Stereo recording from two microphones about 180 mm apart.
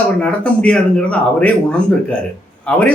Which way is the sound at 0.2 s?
5° left (ahead or behind).